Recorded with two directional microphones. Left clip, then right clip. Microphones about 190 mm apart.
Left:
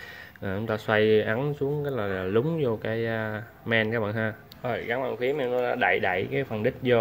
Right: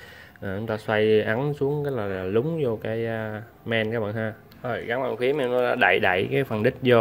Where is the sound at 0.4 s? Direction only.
Centre (ahead or behind).